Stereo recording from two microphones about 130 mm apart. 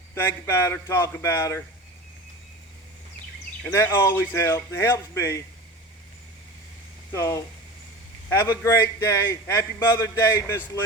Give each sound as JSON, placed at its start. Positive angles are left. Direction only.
{"t": 0.1, "sound": "a man's voice", "side_deg": 20}
{"t": 3.7, "sound": "a man's voice", "side_deg": 20}
{"t": 7.1, "sound": "a man's voice", "side_deg": 25}